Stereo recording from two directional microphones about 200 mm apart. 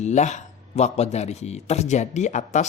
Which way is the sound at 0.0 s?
35° left (ahead or behind).